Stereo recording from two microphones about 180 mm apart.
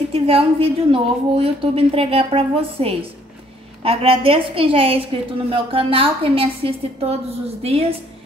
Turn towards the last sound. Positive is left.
turn(degrees=-35)  # may be behind; listen again after turning